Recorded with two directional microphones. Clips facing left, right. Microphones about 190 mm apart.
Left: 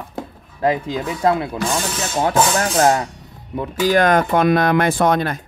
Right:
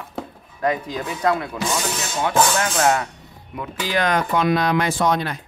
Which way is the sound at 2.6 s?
40° left (ahead or behind).